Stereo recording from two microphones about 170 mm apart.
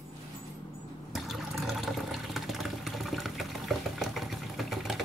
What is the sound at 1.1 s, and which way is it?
Water, centre (ahead or behind).